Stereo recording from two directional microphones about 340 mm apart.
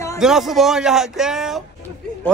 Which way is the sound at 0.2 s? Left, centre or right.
Centre.